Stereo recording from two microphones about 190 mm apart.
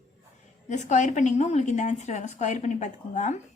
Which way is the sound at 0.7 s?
40° left (ahead or behind).